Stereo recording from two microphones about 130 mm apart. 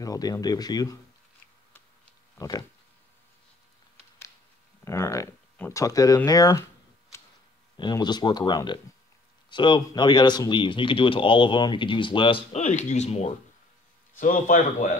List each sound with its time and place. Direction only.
0.0 s speech: 30° left (ahead or behind)
2.3 s speech: 25° left (ahead or behind)
4.8 s speech: 20° left (ahead or behind)
7.7 s speech: 35° left (ahead or behind)
12.5 s speech: 60° left (ahead or behind)
14.1 s speech: 90° left